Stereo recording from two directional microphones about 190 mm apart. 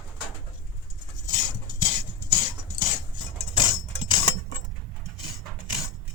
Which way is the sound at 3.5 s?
25° left (ahead or behind).